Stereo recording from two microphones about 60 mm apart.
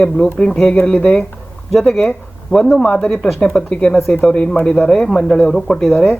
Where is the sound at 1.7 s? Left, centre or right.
Centre.